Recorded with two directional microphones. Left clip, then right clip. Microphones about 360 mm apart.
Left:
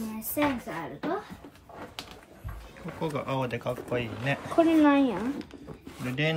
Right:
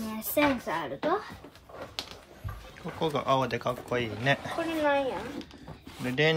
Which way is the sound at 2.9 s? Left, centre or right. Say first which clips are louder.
Right 4 dB; centre.